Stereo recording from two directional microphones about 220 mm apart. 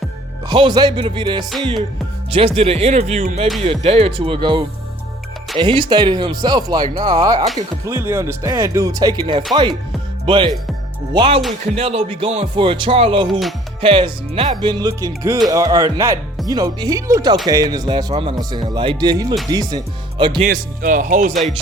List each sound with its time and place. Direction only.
0.4 s a man's voice: 20° right (ahead or behind)
20.4 s speech: 40° right (ahead or behind)